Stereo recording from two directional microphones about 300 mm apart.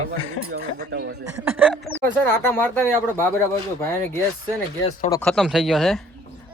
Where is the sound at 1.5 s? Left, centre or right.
Centre.